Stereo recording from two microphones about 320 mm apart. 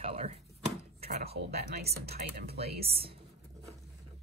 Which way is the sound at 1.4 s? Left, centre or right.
Right.